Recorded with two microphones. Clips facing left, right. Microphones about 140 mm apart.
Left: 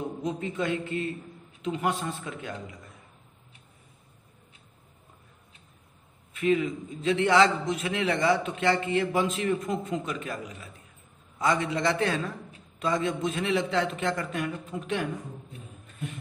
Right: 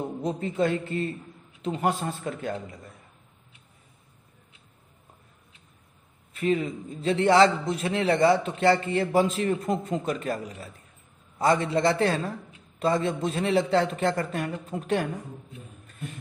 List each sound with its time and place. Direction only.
0.2 s a man's voice: 35° right (ahead or behind)
6.3 s a man's voice: 35° right (ahead or behind)